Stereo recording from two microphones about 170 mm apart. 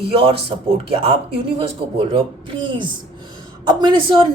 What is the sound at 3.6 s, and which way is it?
Speech, 30° right (ahead or behind).